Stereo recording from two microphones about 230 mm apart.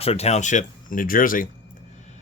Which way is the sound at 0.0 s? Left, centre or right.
Left.